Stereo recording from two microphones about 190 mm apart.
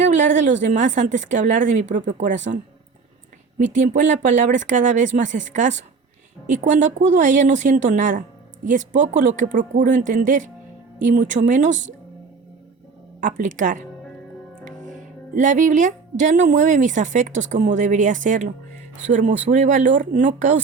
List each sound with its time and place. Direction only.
0.0 s a woman's voice: 40° right (ahead or behind)
3.6 s a woman's voice: 40° right (ahead or behind)
13.2 s speech: 45° right (ahead or behind)
14.6 s music: 40° right (ahead or behind)
19.1 s a woman's voice: 40° right (ahead or behind)